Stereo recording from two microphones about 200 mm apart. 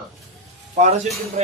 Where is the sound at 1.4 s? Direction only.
35° right (ahead or behind).